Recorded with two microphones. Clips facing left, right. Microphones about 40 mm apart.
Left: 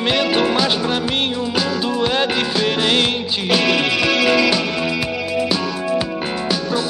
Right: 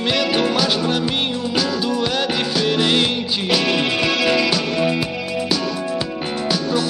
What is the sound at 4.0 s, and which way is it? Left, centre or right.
Music, left.